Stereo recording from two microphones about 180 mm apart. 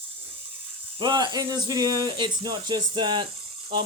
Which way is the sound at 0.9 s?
25° right (ahead or behind).